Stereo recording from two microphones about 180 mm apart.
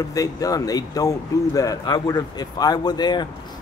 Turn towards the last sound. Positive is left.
turn(degrees=25)  # may be behind; listen again after turning